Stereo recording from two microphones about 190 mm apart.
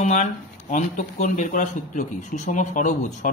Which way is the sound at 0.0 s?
40° left (ahead or behind).